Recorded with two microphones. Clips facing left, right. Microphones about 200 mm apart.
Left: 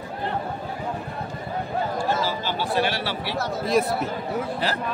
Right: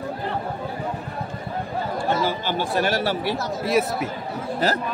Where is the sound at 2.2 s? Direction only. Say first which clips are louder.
Right 2 dB; 50° right (ahead or behind).